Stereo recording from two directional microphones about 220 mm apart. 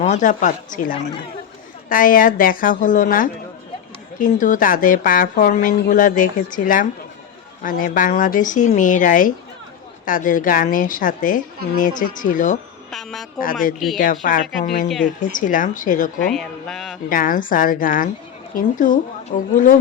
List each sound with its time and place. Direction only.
0.0 s speech: 35° left (ahead or behind)
12.9 s a man's voice: centre (ahead or behind)
13.4 s speech: 40° left (ahead or behind)
13.7 s a man's voice: centre (ahead or behind)
14.0 s speech: 40° left (ahead or behind)
14.8 s a man's voice: centre (ahead or behind)
15.2 s speech: 35° left (ahead or behind)
16.2 s a man's voice: 5° left (ahead or behind)
17.1 s speech: 40° left (ahead or behind)